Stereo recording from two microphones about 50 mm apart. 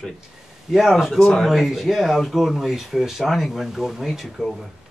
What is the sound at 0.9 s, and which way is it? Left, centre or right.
Speech, centre.